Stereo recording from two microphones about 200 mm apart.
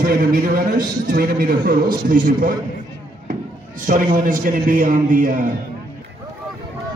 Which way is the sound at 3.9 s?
40° right (ahead or behind).